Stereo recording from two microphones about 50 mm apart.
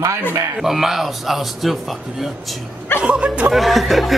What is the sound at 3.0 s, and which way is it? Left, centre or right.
Speech, right.